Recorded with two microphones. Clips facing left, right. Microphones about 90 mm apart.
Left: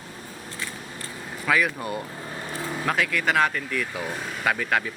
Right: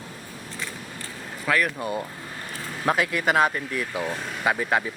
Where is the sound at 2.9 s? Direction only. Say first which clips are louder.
Right 2 dB; 25° right (ahead or behind).